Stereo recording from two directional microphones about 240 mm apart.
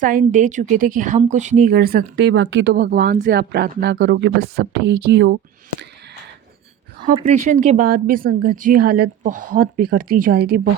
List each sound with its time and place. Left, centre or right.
0.0 s a woman's voice: right
7.3 s a woman's voice: right